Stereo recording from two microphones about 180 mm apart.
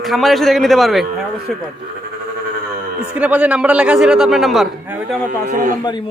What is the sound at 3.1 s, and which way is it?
A man's voice, 5° right (ahead or behind).